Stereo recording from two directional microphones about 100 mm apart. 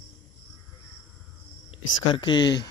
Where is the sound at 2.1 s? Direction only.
50° left (ahead or behind).